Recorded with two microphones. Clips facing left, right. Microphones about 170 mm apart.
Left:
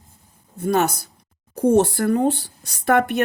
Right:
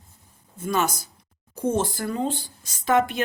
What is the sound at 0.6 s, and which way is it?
Speech, 60° left (ahead or behind).